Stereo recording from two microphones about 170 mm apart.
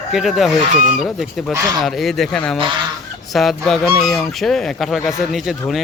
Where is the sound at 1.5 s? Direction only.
15° right (ahead or behind).